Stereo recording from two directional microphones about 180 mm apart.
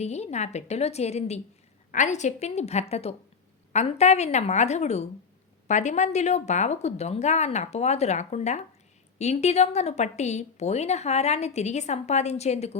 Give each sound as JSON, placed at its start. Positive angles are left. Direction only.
{"t": 0.0, "sound": "a woman's voice", "side_deg": 35}